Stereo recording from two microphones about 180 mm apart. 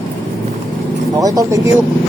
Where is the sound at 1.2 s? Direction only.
20° right (ahead or behind).